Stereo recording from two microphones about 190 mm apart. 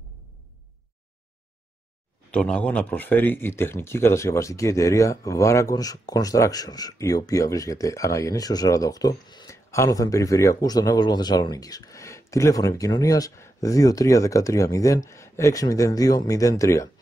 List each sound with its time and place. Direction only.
2.3 s speech: 5° left (ahead or behind)